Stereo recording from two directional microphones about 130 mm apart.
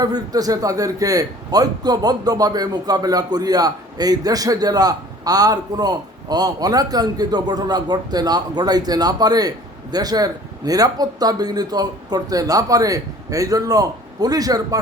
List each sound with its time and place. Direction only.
0.0 s a man's voice: 30° right (ahead or behind)